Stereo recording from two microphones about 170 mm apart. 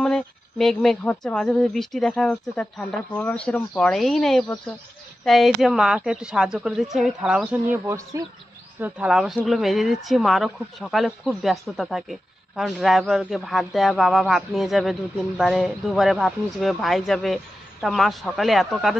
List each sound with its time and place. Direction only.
0.0 s speech: 5° left (ahead or behind)